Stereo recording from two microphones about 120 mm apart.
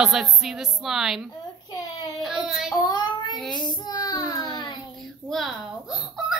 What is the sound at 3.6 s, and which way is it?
Child singing, 35° left (ahead or behind).